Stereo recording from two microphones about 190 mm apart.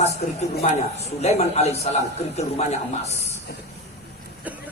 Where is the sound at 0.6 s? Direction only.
35° left (ahead or behind).